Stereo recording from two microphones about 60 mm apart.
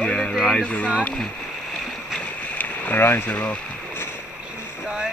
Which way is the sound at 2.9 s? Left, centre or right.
Left.